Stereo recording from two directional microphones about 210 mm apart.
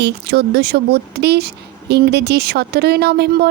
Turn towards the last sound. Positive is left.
turn(degrees=-50)  # may be behind; listen again after turning